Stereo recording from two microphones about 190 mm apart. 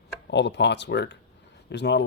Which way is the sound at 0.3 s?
65° left (ahead or behind).